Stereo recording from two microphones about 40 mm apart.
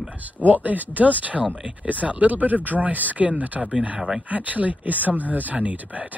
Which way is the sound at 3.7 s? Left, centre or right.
Right.